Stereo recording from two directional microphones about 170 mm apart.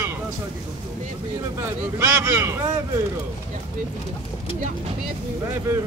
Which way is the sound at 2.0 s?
10° right (ahead or behind).